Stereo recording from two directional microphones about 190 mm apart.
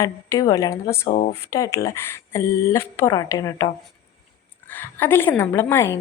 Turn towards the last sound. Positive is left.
turn(degrees=10)  # may be behind; listen again after turning